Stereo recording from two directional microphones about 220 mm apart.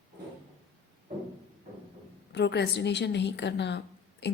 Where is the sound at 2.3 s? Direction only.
50° left (ahead or behind).